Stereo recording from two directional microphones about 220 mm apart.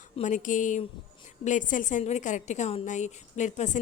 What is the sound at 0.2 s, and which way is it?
A woman's voice, 35° left (ahead or behind).